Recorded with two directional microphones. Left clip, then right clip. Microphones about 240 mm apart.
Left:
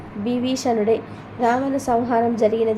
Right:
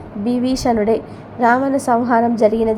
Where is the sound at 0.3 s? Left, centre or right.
Centre.